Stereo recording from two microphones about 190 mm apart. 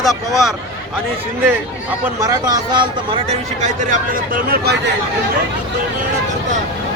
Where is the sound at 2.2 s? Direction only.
20° right (ahead or behind).